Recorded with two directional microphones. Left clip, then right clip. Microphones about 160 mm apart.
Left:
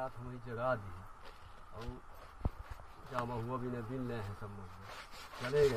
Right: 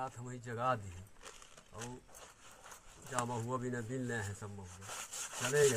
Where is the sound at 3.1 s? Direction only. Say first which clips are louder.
Right 1 dB; 30° right (ahead or behind).